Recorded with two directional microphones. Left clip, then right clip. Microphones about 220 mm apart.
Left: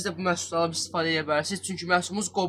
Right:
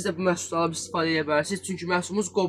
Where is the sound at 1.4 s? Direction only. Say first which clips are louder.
Left 2 dB; 15° left (ahead or behind).